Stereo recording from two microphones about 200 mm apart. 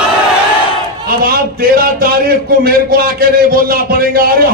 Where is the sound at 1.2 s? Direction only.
50° right (ahead or behind).